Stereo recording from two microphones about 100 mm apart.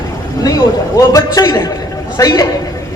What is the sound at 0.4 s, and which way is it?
A man's voice, 35° left (ahead or behind).